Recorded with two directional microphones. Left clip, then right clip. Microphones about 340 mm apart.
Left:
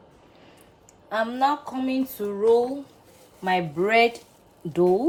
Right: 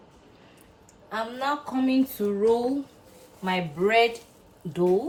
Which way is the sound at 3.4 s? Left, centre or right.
Left.